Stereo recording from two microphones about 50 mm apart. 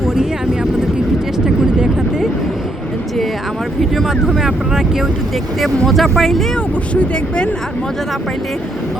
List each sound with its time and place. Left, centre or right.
0.0 s vehicle: centre
3.8 s speech: centre
5.5 s speech: centre
6.9 s speech: left